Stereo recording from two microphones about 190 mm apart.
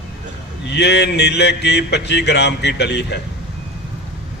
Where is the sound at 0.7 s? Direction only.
65° left (ahead or behind).